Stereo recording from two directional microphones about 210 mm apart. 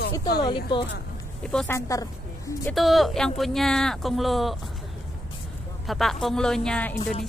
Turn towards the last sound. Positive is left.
turn(degrees=5)  # may be behind; listen again after turning